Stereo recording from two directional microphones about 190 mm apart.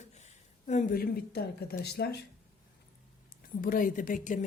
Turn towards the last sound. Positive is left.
turn(degrees=45)  # may be behind; listen again after turning